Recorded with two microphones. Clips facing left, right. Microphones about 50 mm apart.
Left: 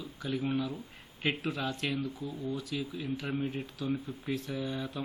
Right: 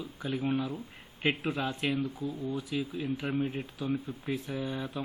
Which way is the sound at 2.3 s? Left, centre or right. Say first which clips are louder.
Right 2 dB; right.